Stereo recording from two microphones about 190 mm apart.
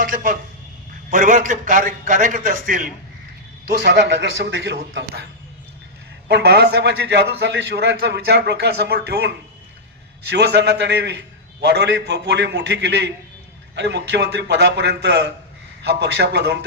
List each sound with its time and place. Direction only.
0.0 s a man's voice: 45° right (ahead or behind)
3.7 s a man's voice: 65° right (ahead or behind)
6.2 s a man's voice: 60° right (ahead or behind)